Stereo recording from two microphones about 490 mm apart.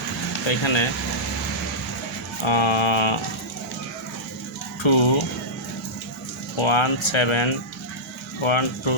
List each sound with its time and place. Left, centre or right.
0.4 s speech: left
2.4 s speech: left
4.8 s speech: left
6.6 s speech: left